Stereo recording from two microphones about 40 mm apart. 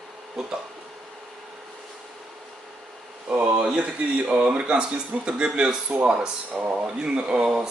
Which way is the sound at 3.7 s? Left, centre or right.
Right.